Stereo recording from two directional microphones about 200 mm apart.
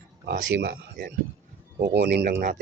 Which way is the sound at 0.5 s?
50° right (ahead or behind).